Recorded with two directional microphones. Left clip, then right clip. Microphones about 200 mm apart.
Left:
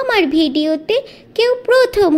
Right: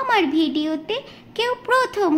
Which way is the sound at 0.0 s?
25° left (ahead or behind).